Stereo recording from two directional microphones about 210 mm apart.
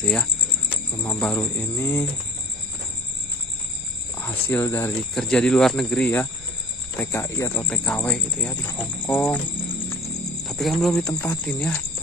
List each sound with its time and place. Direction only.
0.0 s speech: centre (ahead or behind)
4.2 s speech: 10° left (ahead or behind)
10.4 s speech: centre (ahead or behind)